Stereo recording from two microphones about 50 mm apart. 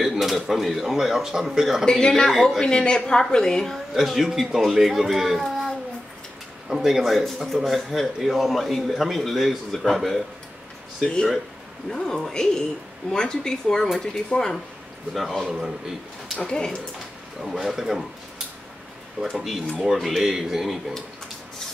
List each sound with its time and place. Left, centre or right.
0.0 s a man's voice: centre
1.9 s a woman's voice: centre
3.7 s a man's voice: centre
15.1 s a man's voice: centre
16.3 s a woman's voice: centre
17.4 s a man's voice: centre
19.3 s a man's voice: centre